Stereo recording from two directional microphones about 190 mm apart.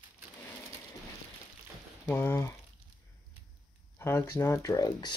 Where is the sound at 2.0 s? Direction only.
10° left (ahead or behind).